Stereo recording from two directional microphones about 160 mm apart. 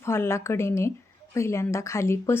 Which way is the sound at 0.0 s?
15° left (ahead or behind).